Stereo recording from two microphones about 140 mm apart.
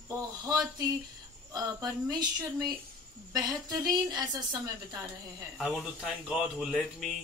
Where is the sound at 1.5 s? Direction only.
25° right (ahead or behind).